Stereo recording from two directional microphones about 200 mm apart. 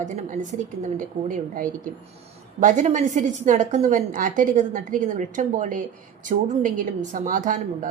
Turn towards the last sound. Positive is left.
turn(degrees=-40)  # may be behind; listen again after turning